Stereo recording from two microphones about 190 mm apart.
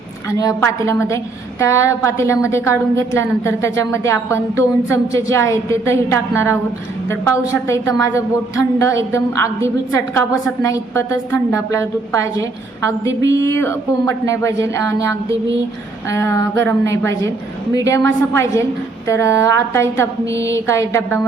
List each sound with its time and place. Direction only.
0.3 s a woman's voice: 15° left (ahead or behind)
13.3 s a woman's voice: 15° left (ahead or behind)